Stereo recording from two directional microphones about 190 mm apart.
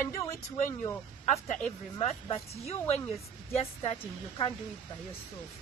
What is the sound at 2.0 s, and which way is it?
Speech, 35° left (ahead or behind).